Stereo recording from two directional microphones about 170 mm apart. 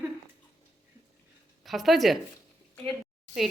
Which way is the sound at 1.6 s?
Centre (ahead or behind).